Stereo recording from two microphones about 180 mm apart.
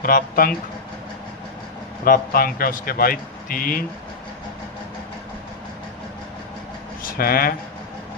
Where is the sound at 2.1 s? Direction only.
55° left (ahead or behind).